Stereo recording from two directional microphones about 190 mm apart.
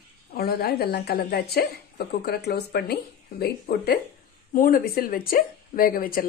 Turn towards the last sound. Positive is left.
turn(degrees=50)  # may be behind; listen again after turning